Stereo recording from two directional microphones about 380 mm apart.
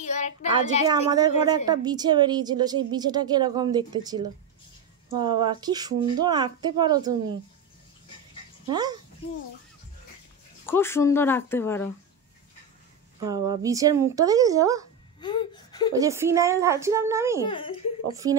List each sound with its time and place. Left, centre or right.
0.0 s a child's voice: centre
1.1 s a woman's voice: centre
5.2 s a woman's voice: centre
8.6 s a child's voice: centre
10.6 s speech: centre
13.3 s a woman's voice: centre
15.1 s wail: centre
15.9 s a woman's voice: centre
17.5 s a child's voice: centre
18.1 s a woman's voice: centre